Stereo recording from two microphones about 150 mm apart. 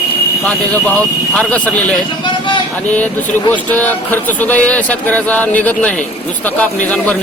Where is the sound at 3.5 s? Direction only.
10° left (ahead or behind).